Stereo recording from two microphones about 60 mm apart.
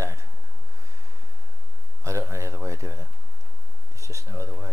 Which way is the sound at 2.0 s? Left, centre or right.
Right.